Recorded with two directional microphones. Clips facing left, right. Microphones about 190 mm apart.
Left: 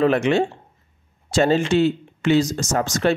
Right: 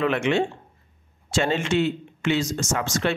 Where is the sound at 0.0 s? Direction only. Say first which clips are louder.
Left 4 dB; 40° left (ahead or behind).